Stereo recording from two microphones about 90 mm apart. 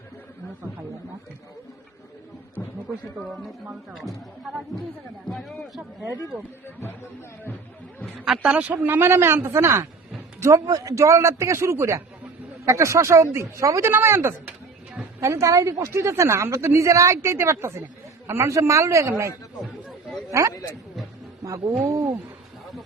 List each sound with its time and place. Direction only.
2.6 s a sound: 35° left (ahead or behind)
4.4 s a man's voice: centre (ahead or behind)
8.2 s a woman's voice: 5° right (ahead or behind); by 13.9 s 35° right (ahead or behind)
13.9 s a woman's voice: 25° right (ahead or behind)
20.3 s a woman's voice: 30° right (ahead or behind)
21.7 s a woman's voice: 35° right (ahead or behind)